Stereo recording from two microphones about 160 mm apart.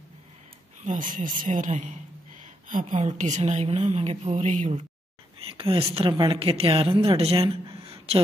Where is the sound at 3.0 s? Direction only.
50° right (ahead or behind).